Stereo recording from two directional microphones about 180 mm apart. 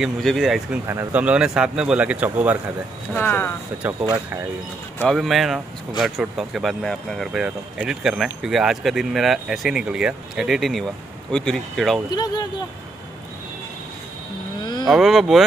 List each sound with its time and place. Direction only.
0.0 s speech: centre (ahead or behind)
0.8 s speech: 10° right (ahead or behind)
3.2 s speech: 10° left (ahead or behind)
3.7 s speech: 10° right (ahead or behind)
4.9 s speech: centre (ahead or behind)
12.1 s speech: 20° left (ahead or behind)
14.6 s vehicle: 25° left (ahead or behind)
14.9 s speech: centre (ahead or behind)